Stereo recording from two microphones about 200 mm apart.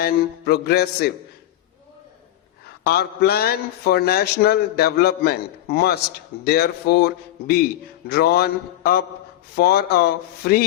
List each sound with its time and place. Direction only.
0.0 s a man's voice: 55° left (ahead or behind)
2.8 s a man's voice: 55° left (ahead or behind)